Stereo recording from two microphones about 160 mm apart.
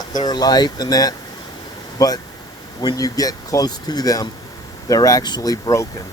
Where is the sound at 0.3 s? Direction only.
25° left (ahead or behind).